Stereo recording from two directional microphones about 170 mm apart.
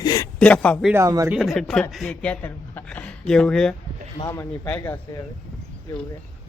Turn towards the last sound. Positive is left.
turn(degrees=20)  # may be behind; listen again after turning